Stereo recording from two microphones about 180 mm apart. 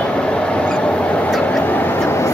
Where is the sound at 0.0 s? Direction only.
5° left (ahead or behind).